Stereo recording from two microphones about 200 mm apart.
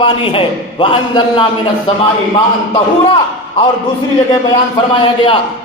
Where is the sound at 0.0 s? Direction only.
25° left (ahead or behind).